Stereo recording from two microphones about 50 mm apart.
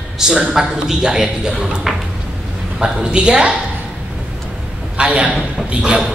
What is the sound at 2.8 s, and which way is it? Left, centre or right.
Speech, centre.